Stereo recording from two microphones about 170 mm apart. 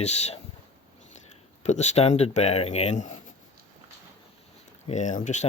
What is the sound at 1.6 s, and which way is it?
Speech, 40° left (ahead or behind).